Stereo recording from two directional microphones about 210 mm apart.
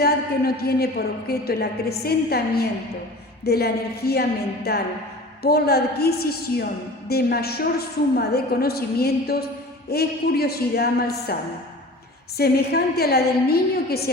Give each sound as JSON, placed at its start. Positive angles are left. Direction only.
{"t": 0.0, "sound": "a woman's voice", "side_deg": 50}
{"t": 12.4, "sound": "a woman's voice", "side_deg": 50}